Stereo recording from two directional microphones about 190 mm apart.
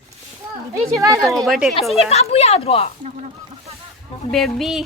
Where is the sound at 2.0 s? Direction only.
35° left (ahead or behind).